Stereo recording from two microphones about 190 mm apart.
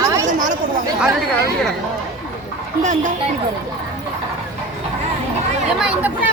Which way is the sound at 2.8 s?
40° right (ahead or behind).